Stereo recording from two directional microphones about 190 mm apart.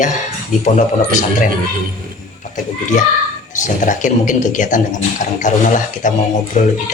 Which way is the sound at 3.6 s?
40° left (ahead or behind).